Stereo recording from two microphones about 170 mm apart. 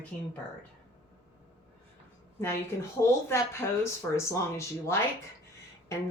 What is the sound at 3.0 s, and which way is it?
Speech, 15° left (ahead or behind).